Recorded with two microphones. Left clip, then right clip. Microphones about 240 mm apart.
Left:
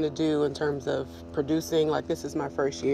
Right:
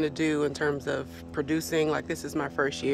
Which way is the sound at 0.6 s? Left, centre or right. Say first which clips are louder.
Even; right.